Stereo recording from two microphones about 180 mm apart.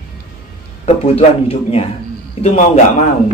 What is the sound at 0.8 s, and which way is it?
A man's voice, 35° left (ahead or behind).